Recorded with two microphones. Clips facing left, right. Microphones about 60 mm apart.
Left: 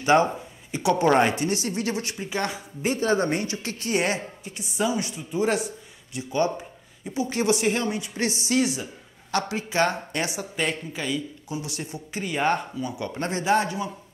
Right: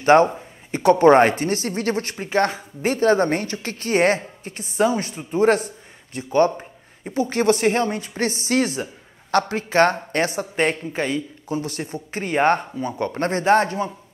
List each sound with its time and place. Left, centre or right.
0.0 s speech: right